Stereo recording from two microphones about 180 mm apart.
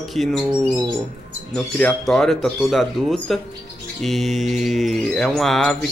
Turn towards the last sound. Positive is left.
turn(degrees=5)  # may be behind; listen again after turning